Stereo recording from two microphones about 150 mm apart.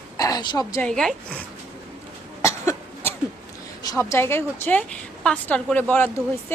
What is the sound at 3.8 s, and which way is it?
A woman's voice, 25° left (ahead or behind).